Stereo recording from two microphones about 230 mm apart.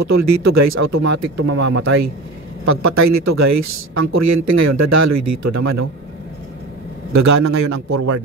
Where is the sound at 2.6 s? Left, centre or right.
Right.